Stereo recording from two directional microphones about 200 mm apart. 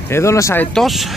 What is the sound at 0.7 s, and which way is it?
Speech, centre (ahead or behind).